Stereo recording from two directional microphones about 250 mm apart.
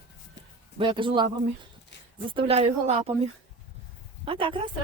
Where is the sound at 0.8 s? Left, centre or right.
Centre.